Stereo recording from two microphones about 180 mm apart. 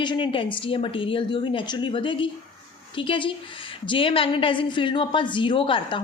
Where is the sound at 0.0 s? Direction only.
25° left (ahead or behind).